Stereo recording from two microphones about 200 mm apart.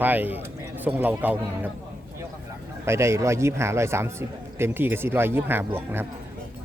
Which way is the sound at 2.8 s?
15° right (ahead or behind).